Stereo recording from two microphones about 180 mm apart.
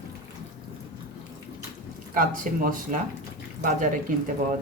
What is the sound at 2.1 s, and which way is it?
Speech, 50° right (ahead or behind).